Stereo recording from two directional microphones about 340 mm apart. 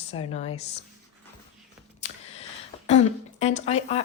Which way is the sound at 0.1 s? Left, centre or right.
Centre.